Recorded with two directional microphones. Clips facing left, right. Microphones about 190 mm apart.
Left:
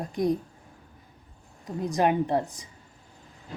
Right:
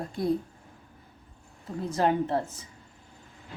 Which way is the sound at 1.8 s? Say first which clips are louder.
Left 2 dB; 15° left (ahead or behind).